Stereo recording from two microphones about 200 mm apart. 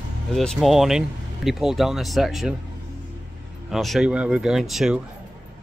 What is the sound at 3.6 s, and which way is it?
Speech, centre (ahead or behind).